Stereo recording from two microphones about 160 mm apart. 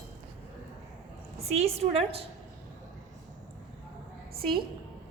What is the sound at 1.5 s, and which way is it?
Speech, 40° right (ahead or behind).